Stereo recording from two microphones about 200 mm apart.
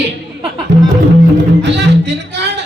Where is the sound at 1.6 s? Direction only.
60° right (ahead or behind).